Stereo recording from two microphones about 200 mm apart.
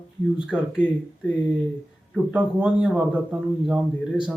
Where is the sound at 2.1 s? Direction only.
5° right (ahead or behind).